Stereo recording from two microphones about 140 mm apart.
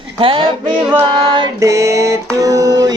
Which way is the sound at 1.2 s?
35° right (ahead or behind).